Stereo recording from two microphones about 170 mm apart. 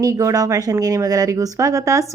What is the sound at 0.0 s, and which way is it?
Speech, 20° right (ahead or behind).